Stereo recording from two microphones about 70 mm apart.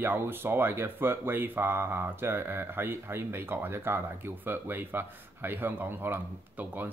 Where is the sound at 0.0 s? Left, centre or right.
Right.